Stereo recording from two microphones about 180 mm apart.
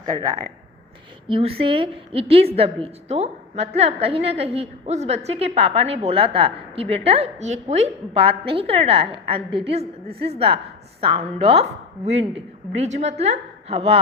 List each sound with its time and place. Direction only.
0.0 s speech: 20° right (ahead or behind)
1.3 s a woman's voice: 30° right (ahead or behind)